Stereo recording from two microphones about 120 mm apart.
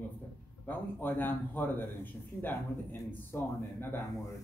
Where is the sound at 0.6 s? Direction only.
15° left (ahead or behind).